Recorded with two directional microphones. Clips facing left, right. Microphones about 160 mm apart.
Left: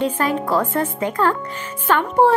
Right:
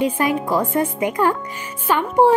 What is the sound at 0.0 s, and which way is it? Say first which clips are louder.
A woman's voice: right 1 dB; 15° right (ahead or behind).